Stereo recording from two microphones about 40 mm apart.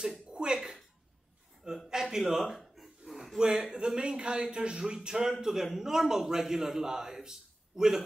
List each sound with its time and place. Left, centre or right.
0.3 s slap: right
1.9 s a sound: centre
3.3 s a man's voice: centre